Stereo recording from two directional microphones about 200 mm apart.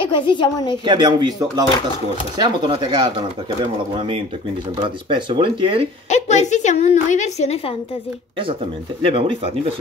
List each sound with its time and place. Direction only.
0.0 s a woman's voice: 25° left (ahead or behind)
0.8 s speech: 20° right (ahead or behind)
4.7 s speech: 25° right (ahead or behind)
6.0 s a woman's voice: 35° left (ahead or behind)